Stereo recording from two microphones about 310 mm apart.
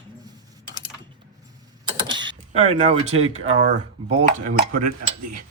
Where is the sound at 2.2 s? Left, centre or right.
Right.